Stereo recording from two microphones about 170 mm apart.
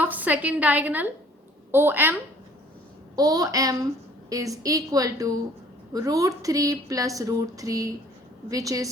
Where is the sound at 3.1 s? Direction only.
20° right (ahead or behind).